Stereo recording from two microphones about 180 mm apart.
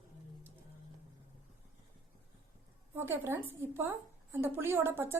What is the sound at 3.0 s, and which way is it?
A woman's voice, 15° right (ahead or behind).